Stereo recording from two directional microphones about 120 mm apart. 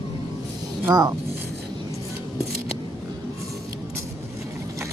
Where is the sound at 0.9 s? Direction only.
35° right (ahead or behind).